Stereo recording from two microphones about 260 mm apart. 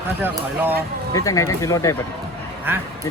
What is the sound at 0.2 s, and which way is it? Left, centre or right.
Speech, centre.